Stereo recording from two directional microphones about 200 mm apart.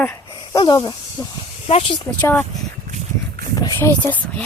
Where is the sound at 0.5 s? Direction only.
25° left (ahead or behind).